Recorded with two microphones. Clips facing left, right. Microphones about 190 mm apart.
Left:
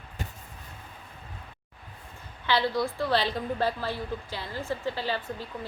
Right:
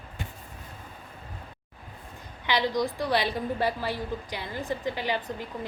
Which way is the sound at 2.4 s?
15° right (ahead or behind).